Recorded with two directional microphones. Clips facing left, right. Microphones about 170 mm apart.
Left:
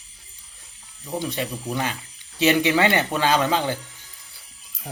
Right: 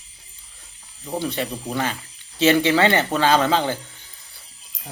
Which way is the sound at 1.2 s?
15° left (ahead or behind).